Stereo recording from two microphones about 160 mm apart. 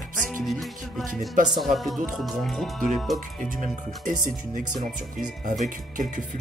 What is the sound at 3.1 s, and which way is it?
Speech, 55° right (ahead or behind).